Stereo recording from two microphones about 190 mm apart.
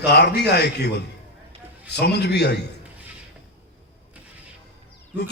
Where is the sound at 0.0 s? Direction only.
60° left (ahead or behind).